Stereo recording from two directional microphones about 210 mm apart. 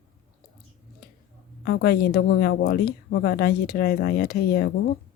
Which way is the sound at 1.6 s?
45° left (ahead or behind).